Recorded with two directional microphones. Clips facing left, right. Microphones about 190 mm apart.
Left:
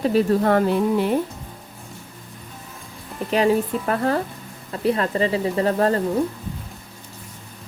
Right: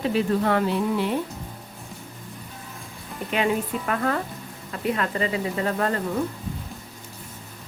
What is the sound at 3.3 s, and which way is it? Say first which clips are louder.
Speech: left 5 dB; 35° left (ahead or behind).